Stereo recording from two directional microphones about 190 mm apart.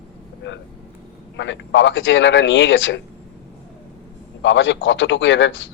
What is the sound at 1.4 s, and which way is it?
A man's voice, 70° left (ahead or behind).